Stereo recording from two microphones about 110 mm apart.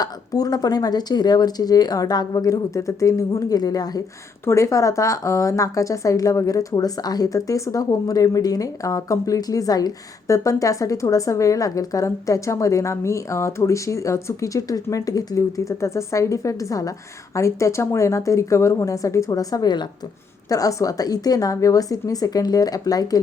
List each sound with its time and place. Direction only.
0.0 s a woman's voice: 35° left (ahead or behind)